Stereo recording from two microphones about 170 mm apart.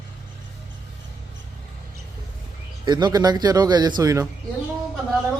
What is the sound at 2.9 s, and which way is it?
Speech, 25° right (ahead or behind).